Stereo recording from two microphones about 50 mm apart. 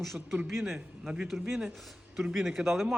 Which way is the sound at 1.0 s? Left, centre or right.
Centre.